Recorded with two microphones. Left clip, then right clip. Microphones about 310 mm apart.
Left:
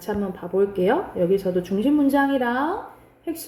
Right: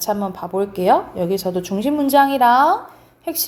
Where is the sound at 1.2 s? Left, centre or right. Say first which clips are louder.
Even; centre.